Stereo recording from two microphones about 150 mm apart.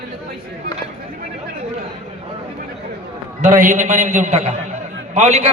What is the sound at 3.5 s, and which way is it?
A man's voice, 60° right (ahead or behind).